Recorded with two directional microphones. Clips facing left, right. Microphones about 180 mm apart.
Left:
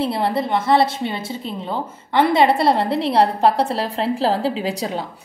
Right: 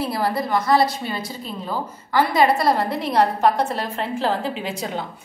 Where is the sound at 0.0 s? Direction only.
25° left (ahead or behind).